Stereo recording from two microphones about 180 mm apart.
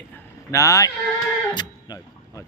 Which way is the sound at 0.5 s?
20° left (ahead or behind).